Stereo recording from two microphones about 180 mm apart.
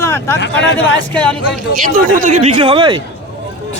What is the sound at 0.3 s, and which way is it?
Speech, 80° left.